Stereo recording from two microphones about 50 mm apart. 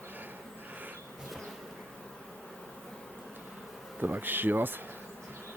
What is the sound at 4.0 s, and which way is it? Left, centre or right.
Speech, right.